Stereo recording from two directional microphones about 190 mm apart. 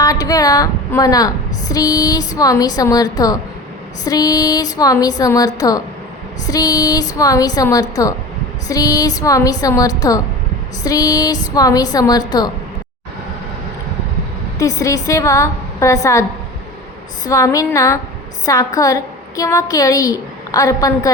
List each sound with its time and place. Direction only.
0.0 s a woman's voice: 20° left (ahead or behind)
14.6 s a woman's voice: 15° left (ahead or behind)
17.2 s a woman's voice: 15° left (ahead or behind)